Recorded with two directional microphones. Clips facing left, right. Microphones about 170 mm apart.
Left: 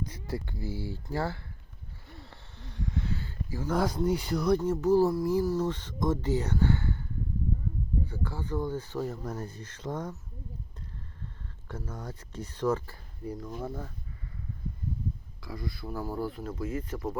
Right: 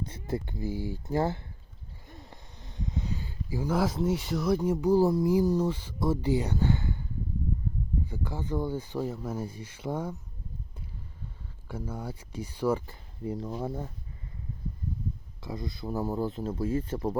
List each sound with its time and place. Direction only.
0.0 s speech: 25° right (ahead or behind)
2.0 s a sound: 15° right (ahead or behind)
3.8 s speech: centre (ahead or behind)
8.0 s speech: 15° right (ahead or behind)
11.7 s speech: 10° right (ahead or behind)
13.2 s speech: 30° right (ahead or behind)
15.4 s speech: 20° right (ahead or behind)